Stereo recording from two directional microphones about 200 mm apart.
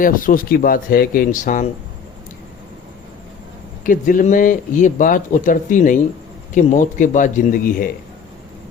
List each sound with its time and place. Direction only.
0.0 s speech: 45° left (ahead or behind)
3.8 s speech: 40° left (ahead or behind)